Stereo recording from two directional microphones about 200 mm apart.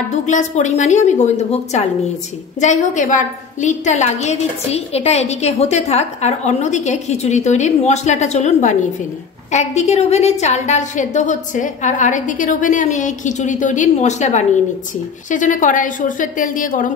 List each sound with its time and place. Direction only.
0.1 s a woman's voice: 35° left (ahead or behind)